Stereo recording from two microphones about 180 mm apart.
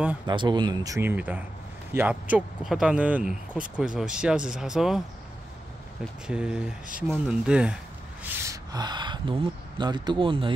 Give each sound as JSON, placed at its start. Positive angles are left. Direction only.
{"t": 0.3, "sound": "speech", "side_deg": -25}
{"t": 6.2, "sound": "speech", "side_deg": -5}
{"t": 8.2, "sound": "gasp", "side_deg": -10}
{"t": 8.7, "sound": "speech", "side_deg": -25}